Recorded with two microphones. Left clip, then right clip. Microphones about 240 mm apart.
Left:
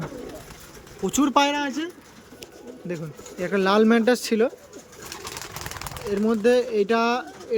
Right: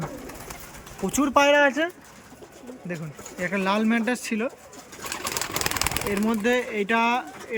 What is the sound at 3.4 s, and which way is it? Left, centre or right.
Speech, centre.